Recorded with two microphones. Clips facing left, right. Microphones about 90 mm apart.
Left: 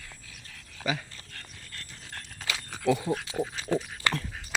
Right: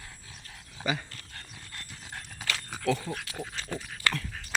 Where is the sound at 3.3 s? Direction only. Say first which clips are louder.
Left 8 dB; 10° left (ahead or behind).